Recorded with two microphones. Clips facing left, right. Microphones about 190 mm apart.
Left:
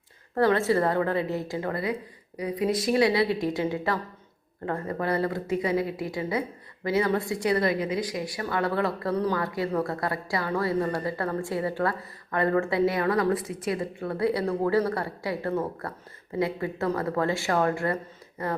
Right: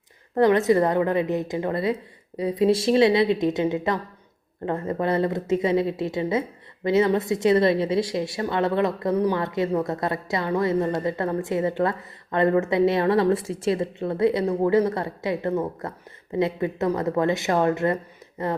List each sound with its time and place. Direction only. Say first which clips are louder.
0.3 s a woman's voice: right 4 dB; 20° right (ahead or behind)